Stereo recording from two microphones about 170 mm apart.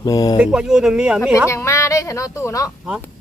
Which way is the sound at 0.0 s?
20° left (ahead or behind).